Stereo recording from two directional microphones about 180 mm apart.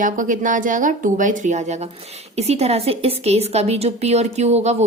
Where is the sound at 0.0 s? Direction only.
45° right (ahead or behind).